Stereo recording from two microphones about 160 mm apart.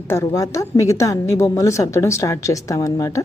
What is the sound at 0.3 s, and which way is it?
A woman's voice, 20° left (ahead or behind).